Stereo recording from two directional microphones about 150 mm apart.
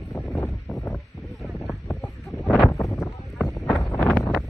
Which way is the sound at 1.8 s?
Centre (ahead or behind).